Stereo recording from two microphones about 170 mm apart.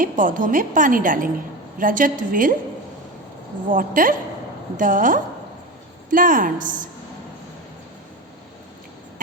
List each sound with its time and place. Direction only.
0.0 s a woman's voice: 50° right (ahead or behind)
3.7 s a woman's voice: 55° right (ahead or behind)